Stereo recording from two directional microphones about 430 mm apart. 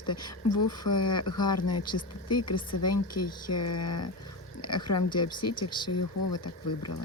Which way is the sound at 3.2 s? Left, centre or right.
Left.